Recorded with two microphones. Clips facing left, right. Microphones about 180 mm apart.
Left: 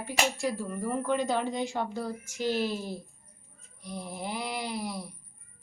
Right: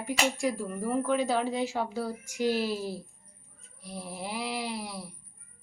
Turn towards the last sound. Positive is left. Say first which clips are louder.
# left 1 dB
turn(degrees=0)  # may be behind; listen again after turning